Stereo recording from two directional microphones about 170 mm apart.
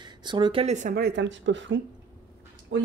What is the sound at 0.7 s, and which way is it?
Speech, 45° right (ahead or behind).